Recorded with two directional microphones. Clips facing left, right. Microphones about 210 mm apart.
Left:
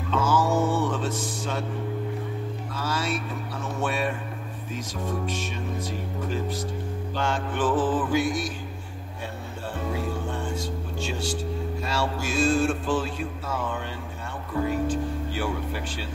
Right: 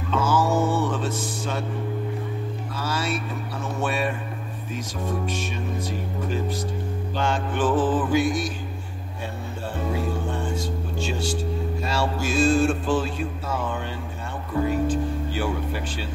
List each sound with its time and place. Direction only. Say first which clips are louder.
0.1 s music: right 1 dB; 5° right (ahead or behind)
2.8 s music: right 1 dB; 5° right (ahead or behind)
3.8 s a sound: right 1 dB; 10° right (ahead or behind)
4.7 s speech: right 2 dB; 10° right (ahead or behind)
7.2 s music: right 2 dB; 20° right (ahead or behind)
9.9 s music: right 3 dB; 30° right (ahead or behind)
14.5 s speech: right 3 dB; 25° right (ahead or behind)